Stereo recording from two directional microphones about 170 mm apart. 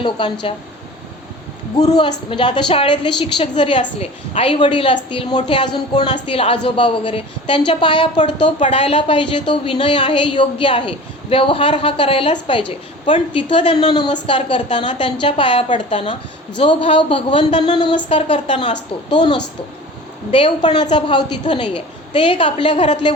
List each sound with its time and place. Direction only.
0.0 s speech: 30° left (ahead or behind)
1.8 s a woman's voice: 25° left (ahead or behind)
8.2 s speech: 45° left (ahead or behind)
8.8 s a woman's voice: 30° left (ahead or behind)